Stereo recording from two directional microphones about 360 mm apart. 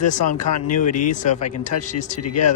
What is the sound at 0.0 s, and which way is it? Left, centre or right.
Speech, centre.